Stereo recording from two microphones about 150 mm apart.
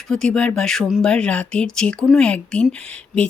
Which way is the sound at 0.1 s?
5° left (ahead or behind).